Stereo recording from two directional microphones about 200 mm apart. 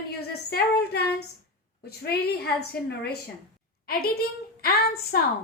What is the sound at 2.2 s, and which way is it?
A woman's voice, 55° left (ahead or behind).